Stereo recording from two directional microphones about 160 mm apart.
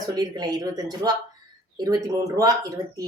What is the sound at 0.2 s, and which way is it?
Speech, 25° right (ahead or behind).